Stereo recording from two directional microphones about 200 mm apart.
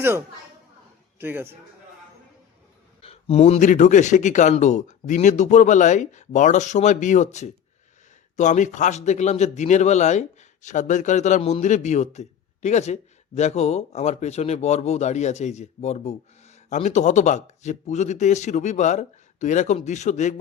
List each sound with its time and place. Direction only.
1.2 s a man's voice: 10° right (ahead or behind)
3.0 s speech: 30° left (ahead or behind)